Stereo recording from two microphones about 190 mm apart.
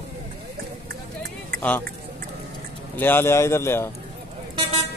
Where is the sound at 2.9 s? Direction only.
10° left (ahead or behind).